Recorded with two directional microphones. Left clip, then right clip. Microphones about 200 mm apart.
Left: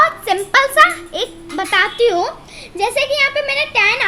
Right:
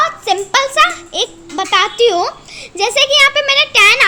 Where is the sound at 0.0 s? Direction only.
20° right (ahead or behind).